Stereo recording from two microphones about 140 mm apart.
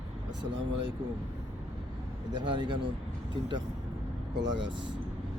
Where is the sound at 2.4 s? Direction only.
35° right (ahead or behind).